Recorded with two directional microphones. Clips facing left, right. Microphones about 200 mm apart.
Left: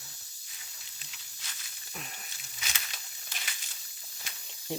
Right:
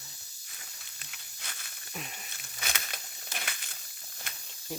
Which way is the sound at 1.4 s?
55° right (ahead or behind).